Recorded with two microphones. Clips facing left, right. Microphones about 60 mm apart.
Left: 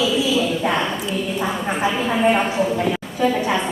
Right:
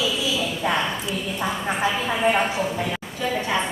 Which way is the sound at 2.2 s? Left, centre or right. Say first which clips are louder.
Left 3 dB; centre.